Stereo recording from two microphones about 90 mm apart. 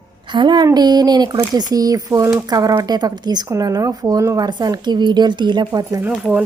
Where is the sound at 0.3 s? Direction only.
55° right (ahead or behind).